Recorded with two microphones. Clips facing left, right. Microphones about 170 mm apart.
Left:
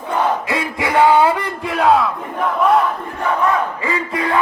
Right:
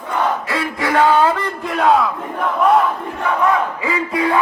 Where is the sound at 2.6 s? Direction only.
Centre (ahead or behind).